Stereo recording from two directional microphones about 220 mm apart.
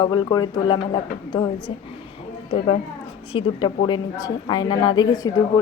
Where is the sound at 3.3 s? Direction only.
20° left (ahead or behind).